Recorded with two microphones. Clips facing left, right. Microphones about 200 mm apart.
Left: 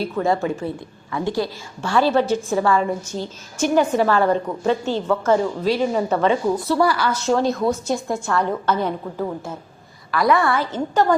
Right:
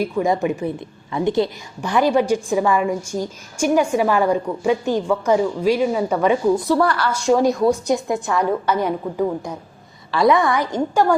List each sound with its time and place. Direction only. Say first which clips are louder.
0.0 s a woman's voice: right 2 dB; 15° right (ahead or behind)
6.7 s a woman's voice: even; 5° left (ahead or behind)
7.6 s a woman's voice: right 4 dB; 15° right (ahead or behind)
10.1 s a woman's voice: right 2 dB; 25° right (ahead or behind)